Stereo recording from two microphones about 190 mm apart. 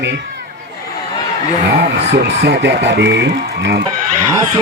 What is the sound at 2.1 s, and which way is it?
A man's voice, 65° right (ahead or behind).